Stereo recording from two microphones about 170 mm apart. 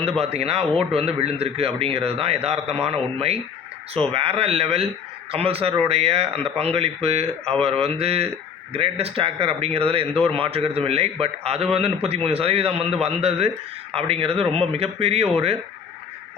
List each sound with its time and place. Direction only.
0.2 s a man's voice: 35° right (ahead or behind)